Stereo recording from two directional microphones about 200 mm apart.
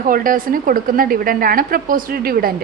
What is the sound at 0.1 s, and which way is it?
A woman's voice, 45° right (ahead or behind).